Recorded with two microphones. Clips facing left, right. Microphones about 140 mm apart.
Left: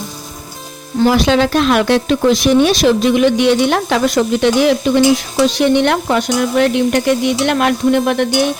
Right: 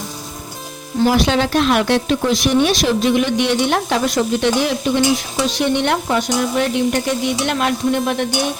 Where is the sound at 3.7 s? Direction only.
90° left.